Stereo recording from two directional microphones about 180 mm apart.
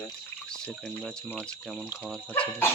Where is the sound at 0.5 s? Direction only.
5° left (ahead or behind).